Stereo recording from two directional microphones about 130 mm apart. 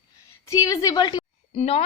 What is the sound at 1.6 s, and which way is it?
Speech, 55° left (ahead or behind).